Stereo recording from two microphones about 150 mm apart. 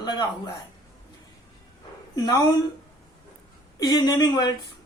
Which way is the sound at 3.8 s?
30° left (ahead or behind).